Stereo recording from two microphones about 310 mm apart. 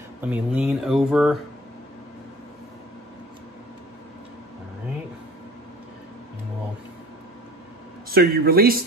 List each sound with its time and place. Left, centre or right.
0.2 s speech: centre
8.1 s a man's voice: right